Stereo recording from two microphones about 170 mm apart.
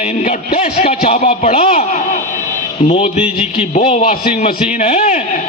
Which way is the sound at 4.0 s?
50° left (ahead or behind).